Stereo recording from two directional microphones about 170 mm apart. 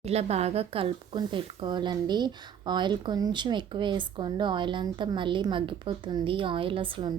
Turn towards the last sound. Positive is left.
turn(degrees=-30)  # may be behind; listen again after turning